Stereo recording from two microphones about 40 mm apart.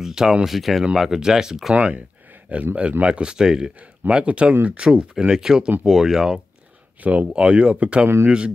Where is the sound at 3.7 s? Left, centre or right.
Right.